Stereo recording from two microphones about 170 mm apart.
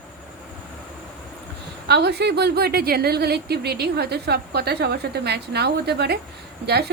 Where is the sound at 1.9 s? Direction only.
75° right (ahead or behind).